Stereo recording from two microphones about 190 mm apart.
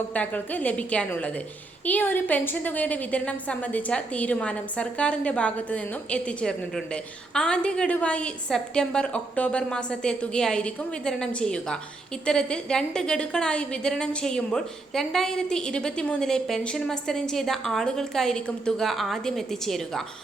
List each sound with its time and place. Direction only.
0.1 s a woman's voice: 10° left (ahead or behind)